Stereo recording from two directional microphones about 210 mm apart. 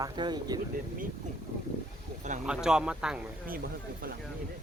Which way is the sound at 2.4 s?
5° right (ahead or behind).